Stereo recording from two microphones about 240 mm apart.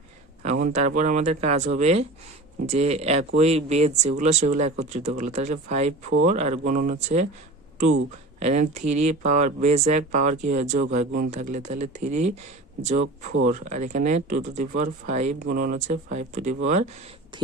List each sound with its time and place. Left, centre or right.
0.4 s speech: right
8.4 s speech: right